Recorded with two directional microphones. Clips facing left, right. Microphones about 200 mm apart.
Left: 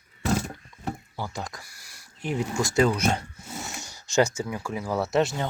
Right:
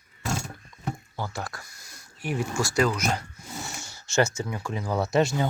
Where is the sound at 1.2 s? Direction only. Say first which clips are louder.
Even; 15° left (ahead or behind).